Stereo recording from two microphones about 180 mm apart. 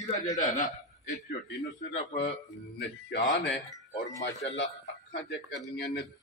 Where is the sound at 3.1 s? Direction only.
70° left (ahead or behind).